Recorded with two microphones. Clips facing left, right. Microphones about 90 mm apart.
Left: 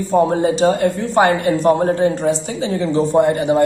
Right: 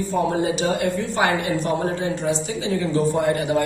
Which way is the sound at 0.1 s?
40° left (ahead or behind).